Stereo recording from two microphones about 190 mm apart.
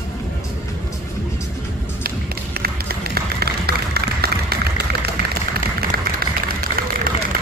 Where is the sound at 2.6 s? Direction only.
55° right (ahead or behind).